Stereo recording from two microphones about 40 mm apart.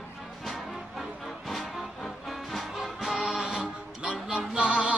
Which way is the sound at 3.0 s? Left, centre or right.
Centre.